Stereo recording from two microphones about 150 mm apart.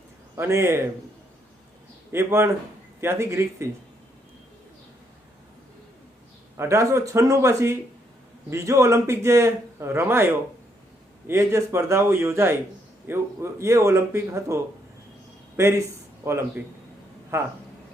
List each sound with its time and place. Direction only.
0.3 s a man's voice: 20° right (ahead or behind)
2.1 s a man's voice: 15° right (ahead or behind)
6.6 s a man's voice: 20° right (ahead or behind)